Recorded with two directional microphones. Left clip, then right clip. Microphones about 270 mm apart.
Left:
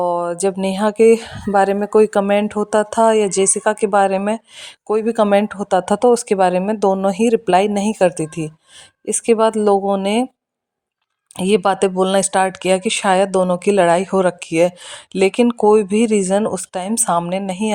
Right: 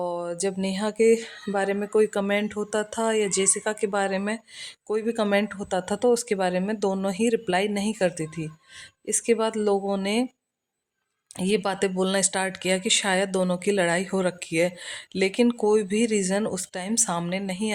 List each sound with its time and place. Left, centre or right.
0.0 s speech: left
11.3 s speech: left